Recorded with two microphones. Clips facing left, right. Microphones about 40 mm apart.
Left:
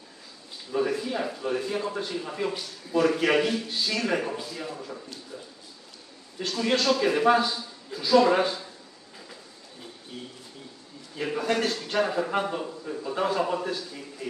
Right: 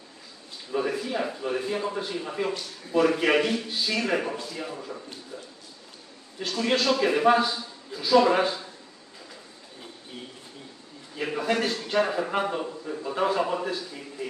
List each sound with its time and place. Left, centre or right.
0.7 s a man's voice: centre
6.4 s a man's voice: centre
11.1 s a man's voice: centre